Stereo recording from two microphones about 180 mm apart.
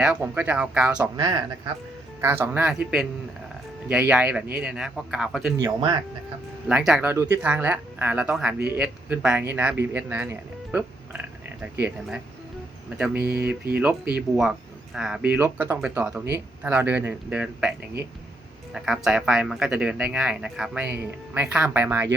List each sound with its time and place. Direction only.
0.0 s speech: 5° right (ahead or behind)
1.1 s speech: 20° right (ahead or behind)
3.8 s speech: 5° right (ahead or behind)
5.6 s speech: 20° right (ahead or behind)
6.7 s speech: 5° right (ahead or behind)
10.7 s music: 10° right (ahead or behind)
13.7 s speech: 5° right (ahead or behind)